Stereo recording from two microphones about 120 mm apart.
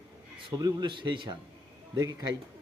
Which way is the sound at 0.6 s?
35° right (ahead or behind).